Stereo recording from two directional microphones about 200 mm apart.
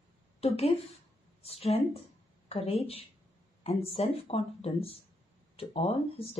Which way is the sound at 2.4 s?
30° left (ahead or behind).